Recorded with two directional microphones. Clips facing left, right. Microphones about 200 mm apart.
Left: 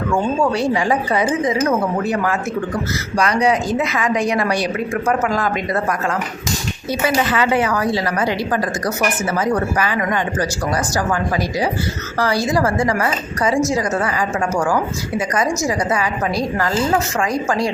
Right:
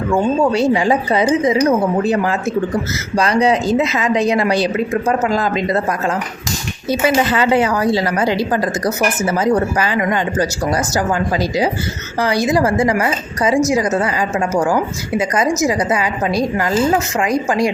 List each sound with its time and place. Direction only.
0.1 s a woman's voice: 20° right (ahead or behind)
7.1 s a woman's voice: 25° right (ahead or behind)